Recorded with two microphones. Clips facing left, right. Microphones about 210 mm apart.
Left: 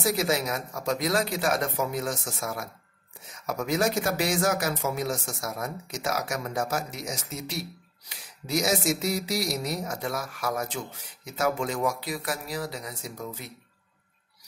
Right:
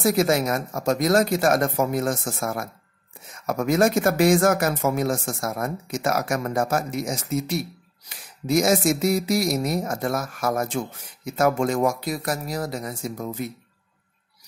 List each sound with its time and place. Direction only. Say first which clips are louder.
0.0 s speech: right 6 dB; 50° right (ahead or behind)